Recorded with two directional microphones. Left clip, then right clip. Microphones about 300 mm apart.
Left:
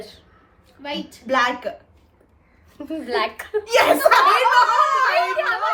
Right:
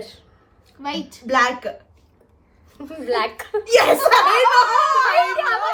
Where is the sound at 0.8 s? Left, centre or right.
Centre.